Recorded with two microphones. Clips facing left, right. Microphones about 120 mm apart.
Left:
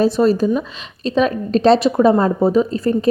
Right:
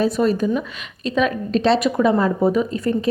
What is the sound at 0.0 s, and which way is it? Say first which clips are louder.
A woman's voice: left 4 dB; 35° left (ahead or behind).